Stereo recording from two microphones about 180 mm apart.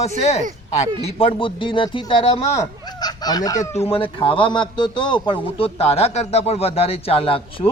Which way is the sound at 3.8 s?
30° left (ahead or behind).